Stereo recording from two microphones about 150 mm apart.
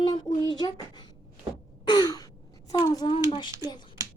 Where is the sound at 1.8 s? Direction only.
25° left (ahead or behind).